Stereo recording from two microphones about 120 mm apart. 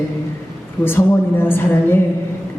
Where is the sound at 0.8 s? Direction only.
20° left (ahead or behind).